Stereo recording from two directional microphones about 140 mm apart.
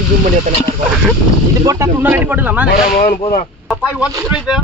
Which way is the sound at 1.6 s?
25° right (ahead or behind).